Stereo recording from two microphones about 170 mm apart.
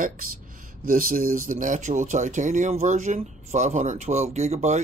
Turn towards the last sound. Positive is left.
turn(degrees=-45)  # may be behind; listen again after turning